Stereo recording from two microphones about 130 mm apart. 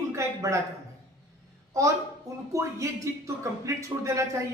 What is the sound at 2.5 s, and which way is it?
Speech, 25° right (ahead or behind).